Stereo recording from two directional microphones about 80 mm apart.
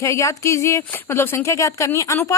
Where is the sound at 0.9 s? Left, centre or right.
Left.